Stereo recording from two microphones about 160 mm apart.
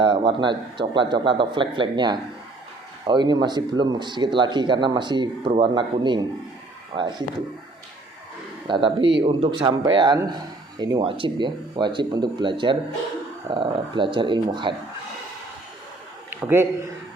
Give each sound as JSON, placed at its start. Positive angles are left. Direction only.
{"t": 0.0, "sound": "speech", "side_deg": -30}
{"t": 8.6, "sound": "speech", "side_deg": -30}
{"t": 16.3, "sound": "a man's voice", "side_deg": -10}